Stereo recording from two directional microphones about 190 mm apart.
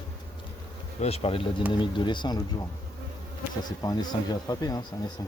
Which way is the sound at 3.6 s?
20° left (ahead or behind).